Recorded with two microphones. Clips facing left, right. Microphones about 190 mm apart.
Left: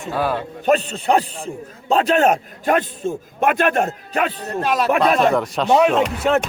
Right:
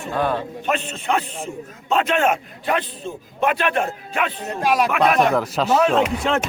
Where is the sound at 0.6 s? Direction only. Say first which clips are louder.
Left 6 dB; 40° left (ahead or behind).